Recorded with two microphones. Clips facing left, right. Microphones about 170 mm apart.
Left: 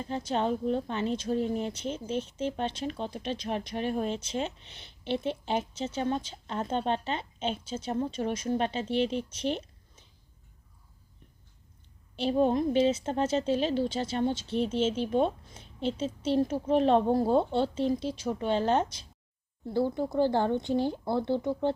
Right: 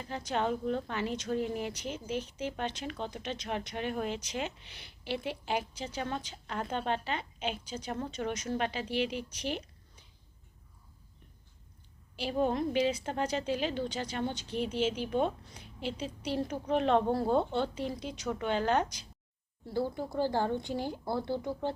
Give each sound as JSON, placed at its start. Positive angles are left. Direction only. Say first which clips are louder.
{"t": 0.1, "sound": "a woman's voice", "louder": "left 3 dB", "side_deg": 20}
{"t": 12.1, "sound": "speech", "louder": "left 5 dB", "side_deg": 25}